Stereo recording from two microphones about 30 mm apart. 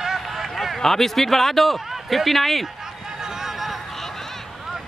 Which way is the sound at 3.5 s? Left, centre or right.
Centre.